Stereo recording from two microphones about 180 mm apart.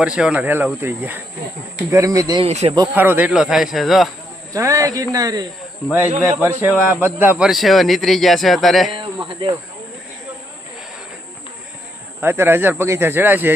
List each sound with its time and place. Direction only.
0.0 s a man's voice: 5° right (ahead or behind); by 2.4 s 20° right (ahead or behind)
2.4 s speech: 35° right (ahead or behind)
2.7 s a man's voice: 20° right (ahead or behind)
3.0 s speech: 10° right (ahead or behind)
4.5 s a man's voice: 15° right (ahead or behind)
6.4 s speech: 10° right (ahead or behind)
9.0 s a sound: 30° right (ahead or behind)
12.2 s speech: 15° right (ahead or behind)